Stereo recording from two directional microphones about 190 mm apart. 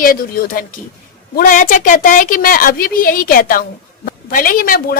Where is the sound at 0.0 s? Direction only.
45° left (ahead or behind).